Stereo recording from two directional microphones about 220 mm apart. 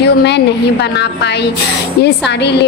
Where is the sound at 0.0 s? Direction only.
50° left (ahead or behind).